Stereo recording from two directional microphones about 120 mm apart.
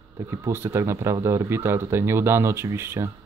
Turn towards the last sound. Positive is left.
turn(degrees=-20)  # may be behind; listen again after turning